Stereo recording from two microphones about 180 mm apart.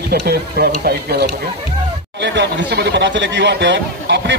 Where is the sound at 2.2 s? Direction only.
70° right (ahead or behind).